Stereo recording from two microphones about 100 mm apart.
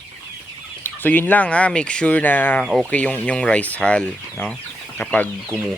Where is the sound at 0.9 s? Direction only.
20° left (ahead or behind).